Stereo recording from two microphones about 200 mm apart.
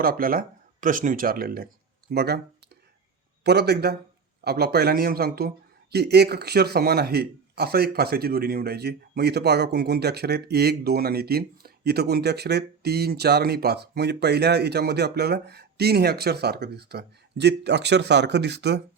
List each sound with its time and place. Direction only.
0.0 s speech: 45° right (ahead or behind)
3.4 s speech: 55° right (ahead or behind)